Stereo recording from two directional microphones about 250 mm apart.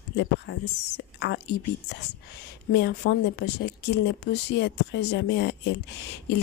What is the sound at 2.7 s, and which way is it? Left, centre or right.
Speech, left.